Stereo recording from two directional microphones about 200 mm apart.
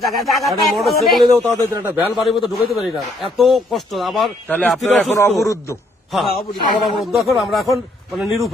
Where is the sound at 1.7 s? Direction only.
10° right (ahead or behind); by 5.8 s 15° left (ahead or behind).